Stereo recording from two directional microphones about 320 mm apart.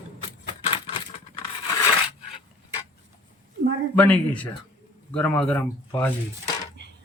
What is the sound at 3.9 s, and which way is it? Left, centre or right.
Speech, centre.